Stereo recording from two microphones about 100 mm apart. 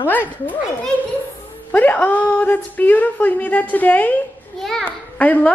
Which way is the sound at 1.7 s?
15° left (ahead or behind).